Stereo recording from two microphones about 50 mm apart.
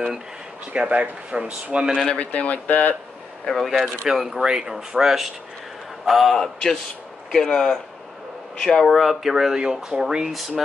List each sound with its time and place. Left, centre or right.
0.7 s speech: right
2.0 s speech: left
3.7 s speech: centre
4.1 s speech: centre
8.8 s speech: centre